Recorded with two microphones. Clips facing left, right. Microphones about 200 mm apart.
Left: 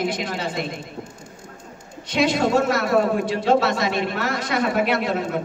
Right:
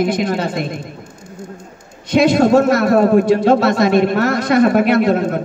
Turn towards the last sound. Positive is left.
turn(degrees=-50)  # may be behind; listen again after turning